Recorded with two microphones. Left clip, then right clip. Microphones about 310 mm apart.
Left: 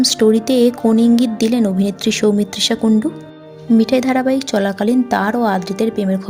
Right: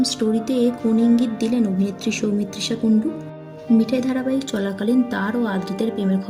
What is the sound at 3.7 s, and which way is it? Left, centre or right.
A woman's voice, left.